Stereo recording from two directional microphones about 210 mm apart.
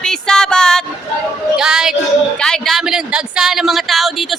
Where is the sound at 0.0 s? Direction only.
5° left (ahead or behind).